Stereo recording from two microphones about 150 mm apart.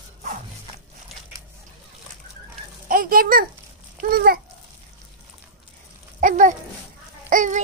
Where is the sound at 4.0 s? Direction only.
90° right.